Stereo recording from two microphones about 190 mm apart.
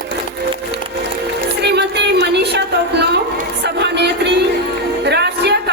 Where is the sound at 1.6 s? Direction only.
60° right (ahead or behind).